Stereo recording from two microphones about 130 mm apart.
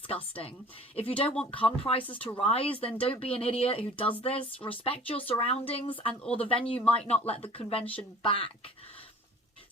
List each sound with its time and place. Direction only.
0.1 s speech: 45° left (ahead or behind)
2.0 s speech: 15° left (ahead or behind)
2.4 s speech: 45° left (ahead or behind)